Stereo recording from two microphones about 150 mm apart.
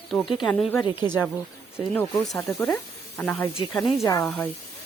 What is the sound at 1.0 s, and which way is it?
Speech, 15° right (ahead or behind).